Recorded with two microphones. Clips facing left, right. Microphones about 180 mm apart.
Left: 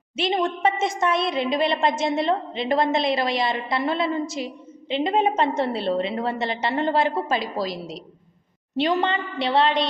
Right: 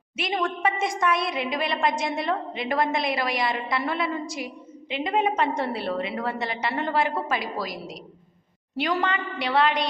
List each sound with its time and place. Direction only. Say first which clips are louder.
0.2 s a woman's voice: left 4 dB; 25° left (ahead or behind)